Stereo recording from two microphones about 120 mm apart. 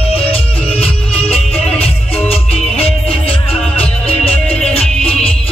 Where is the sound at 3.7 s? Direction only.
55° left (ahead or behind).